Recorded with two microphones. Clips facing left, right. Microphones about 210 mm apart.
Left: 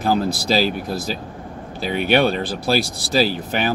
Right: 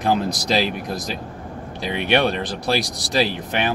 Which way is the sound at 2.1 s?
5° left (ahead or behind).